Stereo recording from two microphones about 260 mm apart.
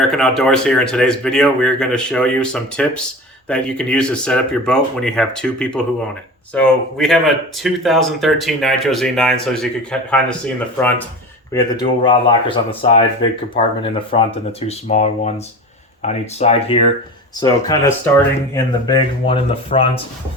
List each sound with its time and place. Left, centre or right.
0.1 s speech: centre
11.5 s speech: centre